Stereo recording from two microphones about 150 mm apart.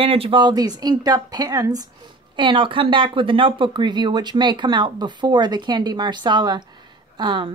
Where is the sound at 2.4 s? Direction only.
35° right (ahead or behind).